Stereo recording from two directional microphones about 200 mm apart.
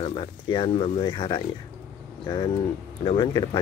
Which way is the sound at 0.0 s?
25° left (ahead or behind).